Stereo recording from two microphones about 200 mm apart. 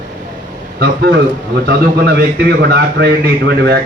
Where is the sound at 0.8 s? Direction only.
50° right (ahead or behind).